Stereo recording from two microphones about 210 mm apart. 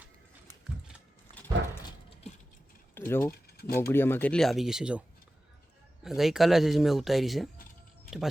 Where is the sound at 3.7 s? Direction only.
10° left (ahead or behind).